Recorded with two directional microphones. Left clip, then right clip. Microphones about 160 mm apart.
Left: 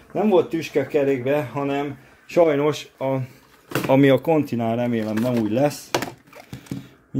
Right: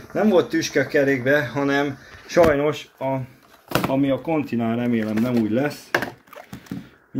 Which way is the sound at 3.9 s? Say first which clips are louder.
Left 9 dB; 90° left.